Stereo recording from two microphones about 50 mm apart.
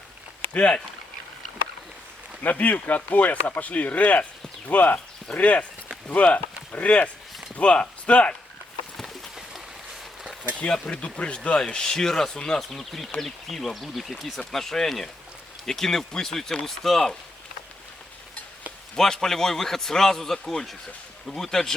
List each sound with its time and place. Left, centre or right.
0.5 s speech: left
2.4 s speech: left
10.6 s speech: left
18.9 s speech: centre